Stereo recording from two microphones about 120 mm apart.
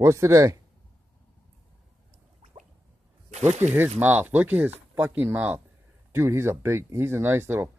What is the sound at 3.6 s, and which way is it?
Speech, 15° right (ahead or behind).